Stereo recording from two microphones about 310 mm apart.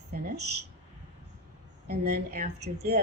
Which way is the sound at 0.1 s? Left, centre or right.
Right.